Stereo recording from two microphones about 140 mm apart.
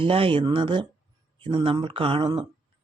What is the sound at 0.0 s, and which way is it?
Speech, 40° right (ahead or behind).